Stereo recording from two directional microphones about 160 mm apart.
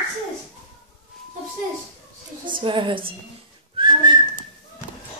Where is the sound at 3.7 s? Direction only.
30° right (ahead or behind).